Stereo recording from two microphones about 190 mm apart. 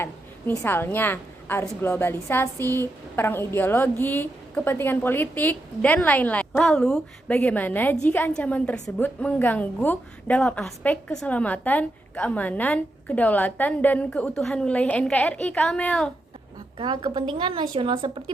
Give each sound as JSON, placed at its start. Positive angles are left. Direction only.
{"t": 0.0, "sound": "a woman's voice", "side_deg": 10}
{"t": 16.7, "sound": "speech", "side_deg": -25}